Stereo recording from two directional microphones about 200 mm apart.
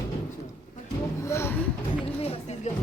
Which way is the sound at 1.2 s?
15° left (ahead or behind).